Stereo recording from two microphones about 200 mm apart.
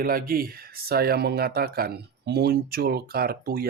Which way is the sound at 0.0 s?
45° right (ahead or behind).